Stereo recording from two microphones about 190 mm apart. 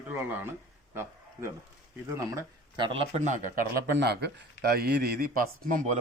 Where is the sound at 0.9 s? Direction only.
10° right (ahead or behind).